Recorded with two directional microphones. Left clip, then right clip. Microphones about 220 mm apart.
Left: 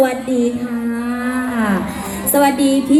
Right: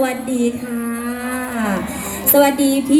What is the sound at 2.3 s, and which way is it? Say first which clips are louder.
Speech: even; 40° right (ahead or behind).